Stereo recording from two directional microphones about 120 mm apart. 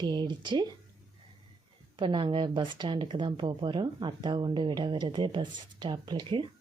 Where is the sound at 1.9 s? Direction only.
40° right (ahead or behind).